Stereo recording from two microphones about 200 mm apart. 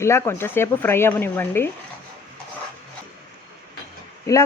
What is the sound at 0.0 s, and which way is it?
Speech, 15° left (ahead or behind).